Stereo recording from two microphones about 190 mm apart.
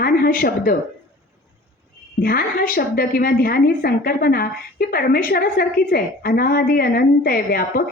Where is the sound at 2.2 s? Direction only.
50° left (ahead or behind).